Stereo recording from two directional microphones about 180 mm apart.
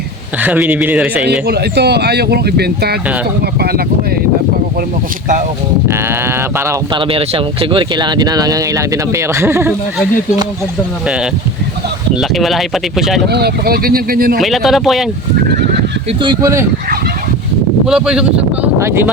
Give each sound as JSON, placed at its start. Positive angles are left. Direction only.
{"t": 0.3, "sound": "speech", "side_deg": -10}
{"t": 1.3, "sound": "speech", "side_deg": -65}
{"t": 5.9, "sound": "speech", "side_deg": -15}
{"t": 6.9, "sound": "speech", "side_deg": -30}
{"t": 11.0, "sound": "speech", "side_deg": -5}
{"t": 13.2, "sound": "speech", "side_deg": -65}
{"t": 14.4, "sound": "speech", "side_deg": 0}
{"t": 16.0, "sound": "speech", "side_deg": -25}
{"t": 17.8, "sound": "speech", "side_deg": -5}